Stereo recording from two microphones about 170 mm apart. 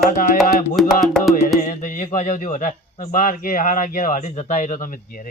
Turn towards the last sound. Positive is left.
turn(degrees=55)  # may be behind; listen again after turning